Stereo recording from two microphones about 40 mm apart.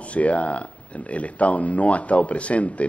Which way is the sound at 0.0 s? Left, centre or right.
Left.